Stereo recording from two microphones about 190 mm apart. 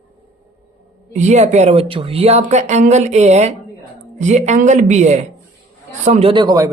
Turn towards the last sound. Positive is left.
turn(degrees=-20)  # may be behind; listen again after turning